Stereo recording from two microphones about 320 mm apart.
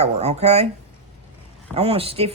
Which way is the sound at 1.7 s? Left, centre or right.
Centre.